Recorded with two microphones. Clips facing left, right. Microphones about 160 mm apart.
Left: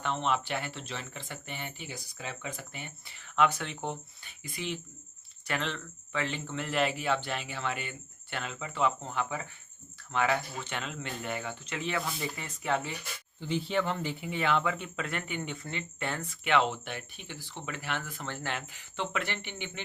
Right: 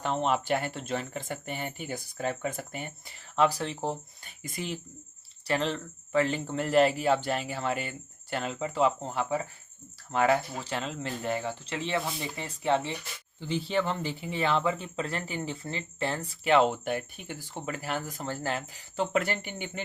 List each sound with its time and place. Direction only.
0.0 s speech: 40° right (ahead or behind)